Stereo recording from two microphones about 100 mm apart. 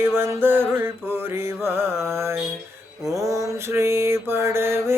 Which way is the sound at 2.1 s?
25° right (ahead or behind).